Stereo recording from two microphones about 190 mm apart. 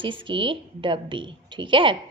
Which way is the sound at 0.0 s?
25° right (ahead or behind).